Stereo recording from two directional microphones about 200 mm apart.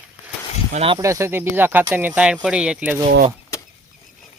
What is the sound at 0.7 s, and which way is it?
Speech, 30° right (ahead or behind).